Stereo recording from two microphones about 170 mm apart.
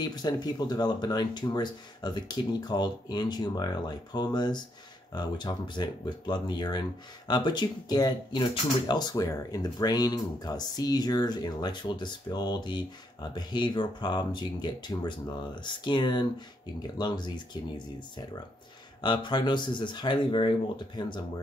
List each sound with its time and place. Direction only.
0.0 s speech: 25° left (ahead or behind)
18.9 s speech: 25° left (ahead or behind)